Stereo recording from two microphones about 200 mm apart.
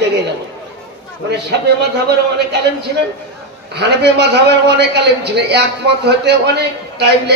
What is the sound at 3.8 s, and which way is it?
A man's voice, 60° right (ahead or behind).